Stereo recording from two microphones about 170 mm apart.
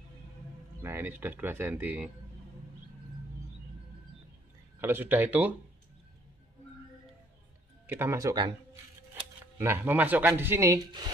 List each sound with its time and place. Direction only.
0.8 s speech: 15° right (ahead or behind)
4.7 s speech: 15° right (ahead or behind)
7.8 s speech: 10° right (ahead or behind)
9.6 s speech: 15° right (ahead or behind)